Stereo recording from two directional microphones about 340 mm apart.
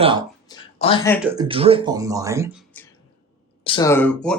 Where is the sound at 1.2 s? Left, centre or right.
Centre.